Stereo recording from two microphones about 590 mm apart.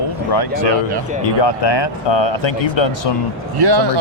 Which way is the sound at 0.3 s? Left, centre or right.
Left.